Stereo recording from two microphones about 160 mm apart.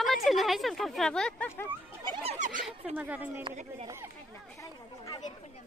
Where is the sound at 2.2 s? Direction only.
45° right (ahead or behind).